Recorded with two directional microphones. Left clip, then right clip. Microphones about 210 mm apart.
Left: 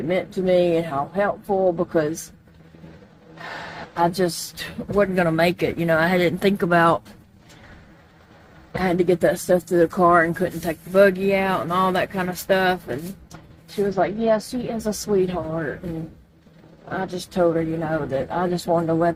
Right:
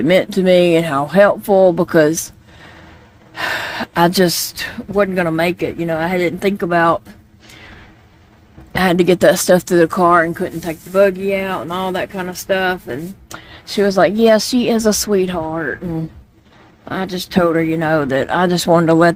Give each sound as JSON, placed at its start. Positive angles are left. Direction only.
{"t": 0.1, "sound": "speech", "side_deg": -50}
{"t": 3.9, "sound": "speech", "side_deg": -50}
{"t": 4.5, "sound": "speech", "side_deg": -35}
{"t": 5.1, "sound": "speech", "side_deg": -20}
{"t": 8.8, "sound": "speech", "side_deg": -40}
{"t": 13.9, "sound": "speech", "side_deg": -55}
{"t": 16.9, "sound": "speech", "side_deg": -40}